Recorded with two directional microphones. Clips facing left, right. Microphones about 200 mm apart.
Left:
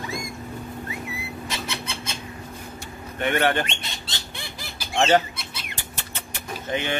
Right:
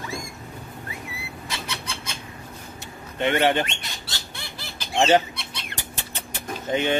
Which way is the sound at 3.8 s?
20° left (ahead or behind).